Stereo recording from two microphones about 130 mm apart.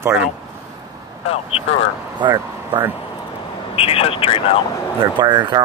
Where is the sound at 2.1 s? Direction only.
35° right (ahead or behind).